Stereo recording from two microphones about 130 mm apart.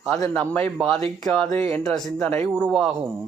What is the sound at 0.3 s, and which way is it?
Speech, 15° left (ahead or behind).